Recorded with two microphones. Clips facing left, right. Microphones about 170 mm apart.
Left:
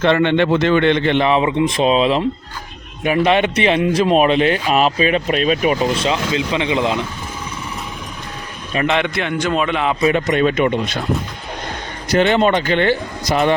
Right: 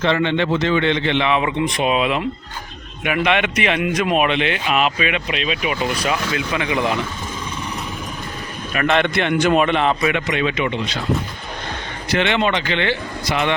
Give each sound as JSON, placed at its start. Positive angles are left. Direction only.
{"t": 0.0, "sound": "a man's voice", "side_deg": 55}
{"t": 1.4, "sound": "a man's voice", "side_deg": 25}
{"t": 5.9, "sound": "speech", "side_deg": 25}
{"t": 8.7, "sound": "a man's voice", "side_deg": 20}
{"t": 10.1, "sound": "speech", "side_deg": 40}
{"t": 12.0, "sound": "a man's voice", "side_deg": 40}